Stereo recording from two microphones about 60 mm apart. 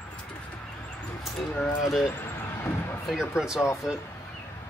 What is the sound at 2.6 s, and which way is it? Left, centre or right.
Basketball bounce, left.